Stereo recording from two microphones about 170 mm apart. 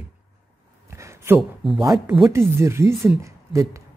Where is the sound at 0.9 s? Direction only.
15° right (ahead or behind).